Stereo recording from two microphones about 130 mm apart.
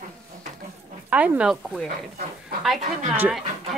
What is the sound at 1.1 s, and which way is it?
Speech, 10° right (ahead or behind).